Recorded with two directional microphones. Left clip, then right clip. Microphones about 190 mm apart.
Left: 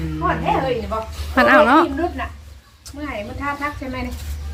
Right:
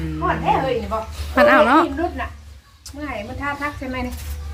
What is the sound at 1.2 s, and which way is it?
Speech, 10° left (ahead or behind).